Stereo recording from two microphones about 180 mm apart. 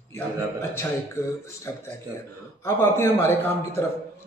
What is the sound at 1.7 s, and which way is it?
A man's voice, 15° left (ahead or behind).